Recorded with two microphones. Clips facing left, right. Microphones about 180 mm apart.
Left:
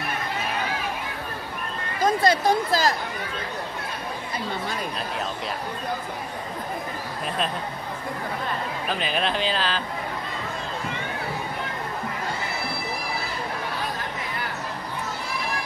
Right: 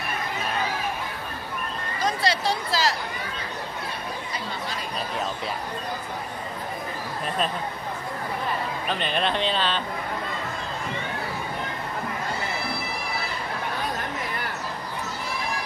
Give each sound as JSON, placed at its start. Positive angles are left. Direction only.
{"t": 2.0, "sound": "speech", "side_deg": 50}
{"t": 8.8, "sound": "speech", "side_deg": 5}